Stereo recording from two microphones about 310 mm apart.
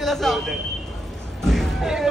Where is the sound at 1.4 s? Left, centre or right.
Centre.